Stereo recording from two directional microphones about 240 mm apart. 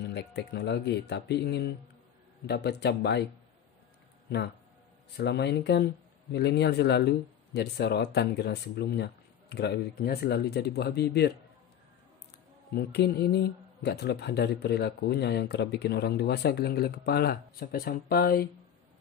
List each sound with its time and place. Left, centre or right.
0.0 s speech: left
5.1 s speech: left
12.7 s speech: left